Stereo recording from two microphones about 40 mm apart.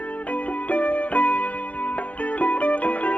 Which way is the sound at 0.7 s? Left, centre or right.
Left.